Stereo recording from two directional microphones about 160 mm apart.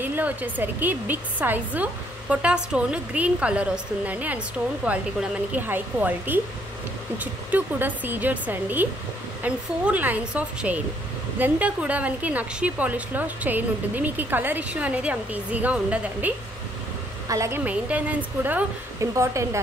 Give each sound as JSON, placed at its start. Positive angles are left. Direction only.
{"t": 0.0, "sound": "a woman's voice", "side_deg": -10}
{"t": 17.3, "sound": "a woman's voice", "side_deg": -20}
{"t": 17.6, "sound": "a woman's voice", "side_deg": -10}